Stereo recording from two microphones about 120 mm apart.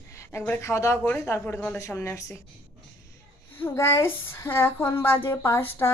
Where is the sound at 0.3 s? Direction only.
15° left (ahead or behind).